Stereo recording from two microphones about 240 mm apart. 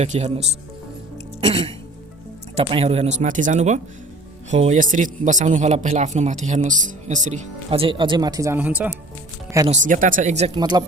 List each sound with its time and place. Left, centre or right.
0.0 s a man's voice: right
1.4 s music: right
2.6 s a man's voice: right; by 9.0 s centre
9.6 s a man's voice: right; by 10.8 s centre